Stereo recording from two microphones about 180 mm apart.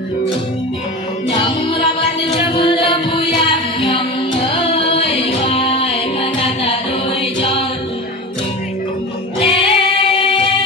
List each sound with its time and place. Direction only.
1.3 s music: 25° left (ahead or behind)
4.9 s music: 35° left (ahead or behind)
9.4 s music: 30° left (ahead or behind)